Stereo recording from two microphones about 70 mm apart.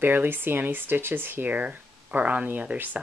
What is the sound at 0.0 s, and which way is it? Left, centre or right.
Speech, right.